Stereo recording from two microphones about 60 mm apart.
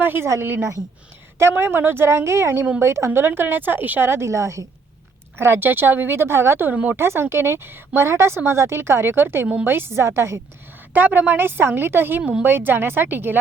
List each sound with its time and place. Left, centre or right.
0.0 s a woman's voice: right
1.4 s speech: right
3.1 s speech: right
4.1 s a woman's voice: right
5.4 s speech: right
6.7 s speech: right
6.9 s speech: right
10.9 s speech: right